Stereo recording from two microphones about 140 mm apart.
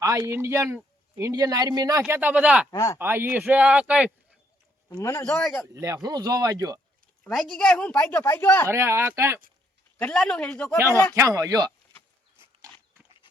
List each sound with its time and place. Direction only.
0.0 s speech: 25° right (ahead or behind)
1.3 s speech: 25° right (ahead or behind)
2.0 s speech: 10° right (ahead or behind)
2.6 s speech: 25° left (ahead or behind)
3.0 s speech: 15° right (ahead or behind)
4.9 s speech: 25° left (ahead or behind)
5.2 s speech: 5° left (ahead or behind)
5.8 s speech: 25° right (ahead or behind)
7.3 s speech: 5° left (ahead or behind)
8.7 s speech: 20° right (ahead or behind)
10.0 s speech: 5° left (ahead or behind)
11.1 s speech: 25° right (ahead or behind)